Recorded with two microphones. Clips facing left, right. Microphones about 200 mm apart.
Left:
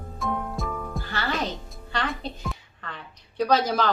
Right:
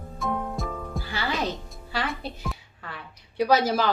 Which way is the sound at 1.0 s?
10° right (ahead or behind).